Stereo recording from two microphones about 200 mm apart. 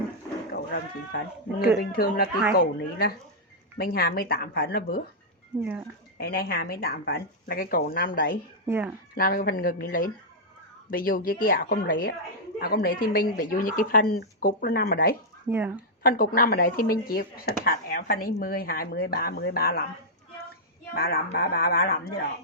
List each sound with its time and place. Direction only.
0.5 s speech: 50° left (ahead or behind)
3.8 s speech: 50° left (ahead or behind)
6.1 s speech: 50° left (ahead or behind)
8.6 s speech: 10° right (ahead or behind)
9.1 s speech: 50° left (ahead or behind)
15.4 s speech: 10° right (ahead or behind)
16.0 s speech: 45° left (ahead or behind)
20.9 s speech: 50° left (ahead or behind)